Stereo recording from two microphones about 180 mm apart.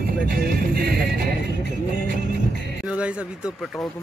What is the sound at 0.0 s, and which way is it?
Music, 55° right (ahead or behind).